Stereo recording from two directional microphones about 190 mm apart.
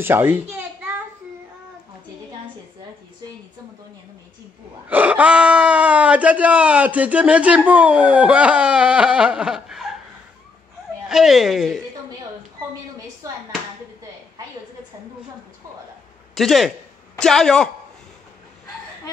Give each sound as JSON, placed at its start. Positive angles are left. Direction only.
{"t": 0.0, "sound": "a sound", "side_deg": -10}
{"t": 4.8, "sound": "speech", "side_deg": -10}
{"t": 11.1, "sound": "speech", "side_deg": 0}
{"t": 16.3, "sound": "speech", "side_deg": 0}